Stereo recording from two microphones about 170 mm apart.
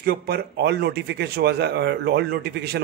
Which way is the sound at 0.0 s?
65° right (ahead or behind).